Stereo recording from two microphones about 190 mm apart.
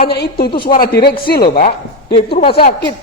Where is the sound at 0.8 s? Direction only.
55° left (ahead or behind).